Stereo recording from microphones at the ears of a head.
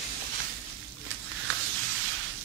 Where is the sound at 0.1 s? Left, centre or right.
Right.